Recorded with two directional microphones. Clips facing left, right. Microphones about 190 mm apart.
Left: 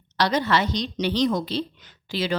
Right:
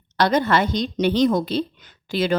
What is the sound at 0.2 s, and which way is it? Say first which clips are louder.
Speech: right 4 dB; 50° right (ahead or behind).